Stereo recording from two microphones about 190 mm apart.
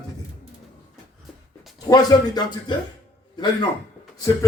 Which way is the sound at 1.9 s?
20° left (ahead or behind).